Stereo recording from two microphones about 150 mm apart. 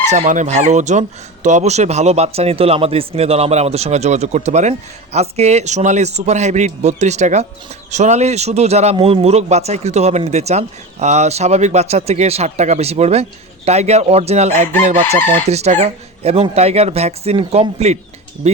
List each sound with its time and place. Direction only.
0.1 s a man's voice: 55° right (ahead or behind)